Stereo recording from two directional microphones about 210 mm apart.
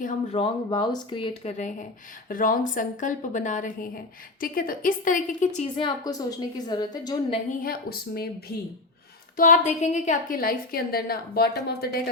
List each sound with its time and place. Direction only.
0.0 s a woman's voice: 40° left (ahead or behind)
0.3 s a woman's voice: 25° left (ahead or behind)
5.8 s a woman's voice: 15° left (ahead or behind)
7.6 s a woman's voice: 45° left (ahead or behind)